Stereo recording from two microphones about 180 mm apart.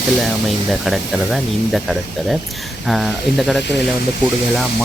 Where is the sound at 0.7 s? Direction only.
Centre (ahead or behind).